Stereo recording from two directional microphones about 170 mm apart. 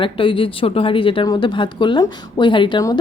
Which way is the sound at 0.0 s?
30° left (ahead or behind).